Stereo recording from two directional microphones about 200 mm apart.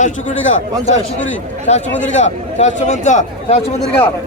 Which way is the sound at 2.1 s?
35° left (ahead or behind).